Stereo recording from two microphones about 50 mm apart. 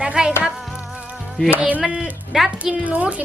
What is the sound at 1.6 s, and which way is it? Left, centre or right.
Speech, right.